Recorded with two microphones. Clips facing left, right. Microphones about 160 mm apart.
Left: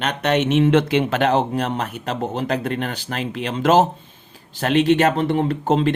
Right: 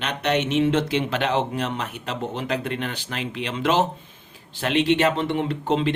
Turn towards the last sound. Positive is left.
turn(degrees=45)  # may be behind; listen again after turning